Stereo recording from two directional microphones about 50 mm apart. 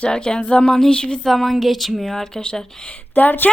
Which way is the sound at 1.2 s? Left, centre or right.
Centre.